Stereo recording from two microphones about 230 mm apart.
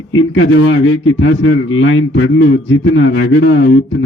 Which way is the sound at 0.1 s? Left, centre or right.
Left.